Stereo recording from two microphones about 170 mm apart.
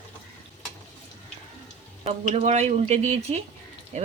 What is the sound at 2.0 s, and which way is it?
Speech, 40° right (ahead or behind).